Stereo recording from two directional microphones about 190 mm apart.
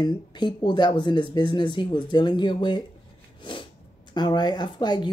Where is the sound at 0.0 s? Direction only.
25° left (ahead or behind).